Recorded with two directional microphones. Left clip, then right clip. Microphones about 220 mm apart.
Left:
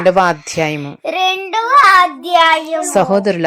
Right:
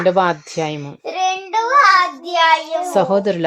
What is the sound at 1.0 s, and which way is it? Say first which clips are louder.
Speech: left 4 dB; 40° left (ahead or behind).